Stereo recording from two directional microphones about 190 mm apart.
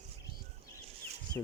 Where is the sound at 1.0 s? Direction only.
30° right (ahead or behind).